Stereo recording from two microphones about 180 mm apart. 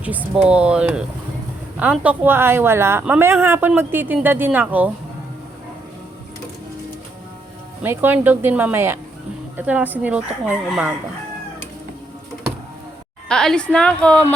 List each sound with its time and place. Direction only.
0.0 s a woman's voice: 10° right (ahead or behind)
7.8 s speech: 10° right (ahead or behind)
13.2 s a woman's voice: 5° left (ahead or behind)